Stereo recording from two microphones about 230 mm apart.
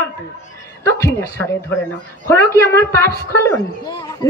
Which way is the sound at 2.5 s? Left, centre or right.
Centre.